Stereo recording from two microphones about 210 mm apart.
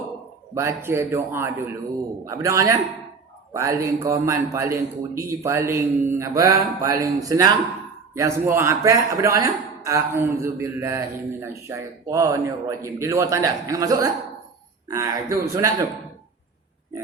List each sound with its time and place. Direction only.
0.5 s a man's voice: 10° right (ahead or behind)